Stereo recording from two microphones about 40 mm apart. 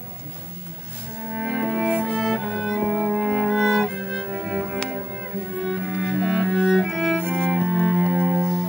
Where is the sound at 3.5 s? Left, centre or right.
Centre.